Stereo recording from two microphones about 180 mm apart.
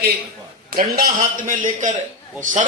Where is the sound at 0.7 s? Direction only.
50° right (ahead or behind).